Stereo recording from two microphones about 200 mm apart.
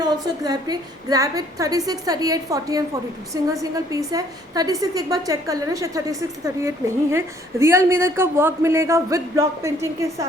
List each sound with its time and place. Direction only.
0.0 s a woman's voice: 20° right (ahead or behind)